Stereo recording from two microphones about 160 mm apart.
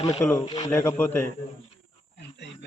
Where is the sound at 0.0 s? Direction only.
25° left (ahead or behind).